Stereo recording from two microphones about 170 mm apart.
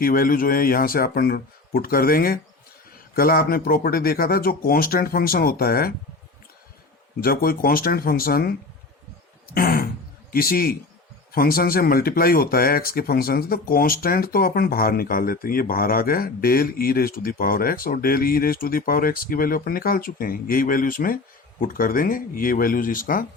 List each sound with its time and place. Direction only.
0.0 s speech: 55° left (ahead or behind)
7.2 s speech: 60° left (ahead or behind)
9.6 s speech: 60° left (ahead or behind)